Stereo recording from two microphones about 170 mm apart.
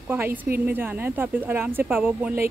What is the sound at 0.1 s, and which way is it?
Speech, 15° right (ahead or behind).